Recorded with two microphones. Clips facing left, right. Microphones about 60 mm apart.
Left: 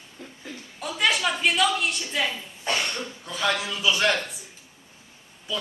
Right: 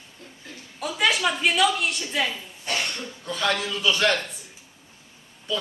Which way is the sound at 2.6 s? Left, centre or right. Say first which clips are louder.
Left 2 dB; left.